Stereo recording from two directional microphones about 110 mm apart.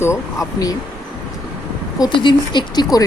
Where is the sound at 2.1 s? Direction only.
45° left (ahead or behind).